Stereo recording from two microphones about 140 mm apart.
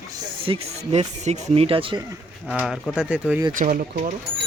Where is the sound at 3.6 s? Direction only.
75° right (ahead or behind).